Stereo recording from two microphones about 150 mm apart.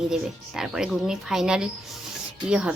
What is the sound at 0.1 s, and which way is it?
A woman's voice, 5° right (ahead or behind).